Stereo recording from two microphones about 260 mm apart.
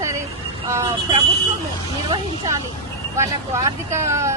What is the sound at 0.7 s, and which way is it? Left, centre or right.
Vehicle, centre.